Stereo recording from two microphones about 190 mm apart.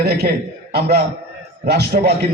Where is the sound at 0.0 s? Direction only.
55° right (ahead or behind).